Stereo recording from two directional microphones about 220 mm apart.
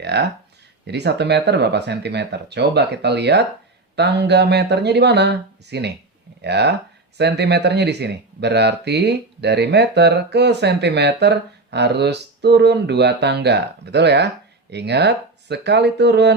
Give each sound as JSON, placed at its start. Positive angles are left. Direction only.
{"t": 0.0, "sound": "speech", "side_deg": -50}